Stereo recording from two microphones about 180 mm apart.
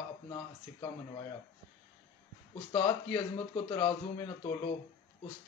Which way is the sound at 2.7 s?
25° left (ahead or behind).